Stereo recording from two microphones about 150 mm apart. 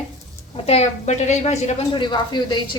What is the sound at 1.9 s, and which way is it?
Speech, 30° left (ahead or behind).